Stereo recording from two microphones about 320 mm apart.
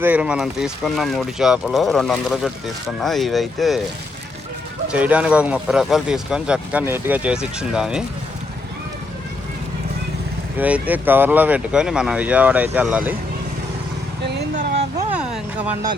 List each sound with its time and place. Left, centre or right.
0.0 s speech: centre
4.9 s speech: centre
10.6 s speech: centre
14.3 s vehicle: right
14.9 s a sound: centre